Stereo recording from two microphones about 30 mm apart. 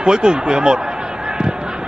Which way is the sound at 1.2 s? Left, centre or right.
Right.